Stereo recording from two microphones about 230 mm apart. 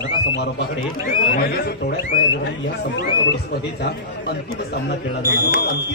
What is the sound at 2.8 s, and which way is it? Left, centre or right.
Speech, left.